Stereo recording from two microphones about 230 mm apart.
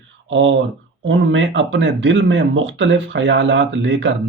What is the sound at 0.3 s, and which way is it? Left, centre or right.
Speech, right.